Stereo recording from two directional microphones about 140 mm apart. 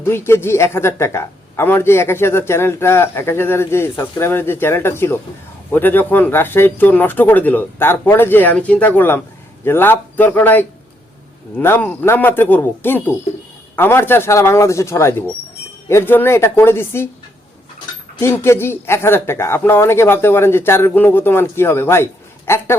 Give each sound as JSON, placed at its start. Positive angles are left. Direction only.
{"t": 0.0, "sound": "speech", "side_deg": 15}
{"t": 18.2, "sound": "speech", "side_deg": 20}